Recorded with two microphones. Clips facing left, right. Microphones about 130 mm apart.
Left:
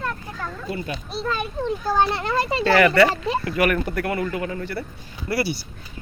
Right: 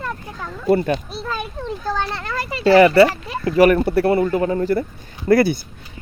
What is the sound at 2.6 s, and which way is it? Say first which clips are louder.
A man's voice: right 6 dB; 30° right (ahead or behind).